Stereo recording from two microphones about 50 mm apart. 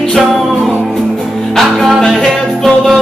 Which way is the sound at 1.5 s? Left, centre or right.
Centre.